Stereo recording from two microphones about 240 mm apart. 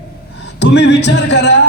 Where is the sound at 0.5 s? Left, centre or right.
Left.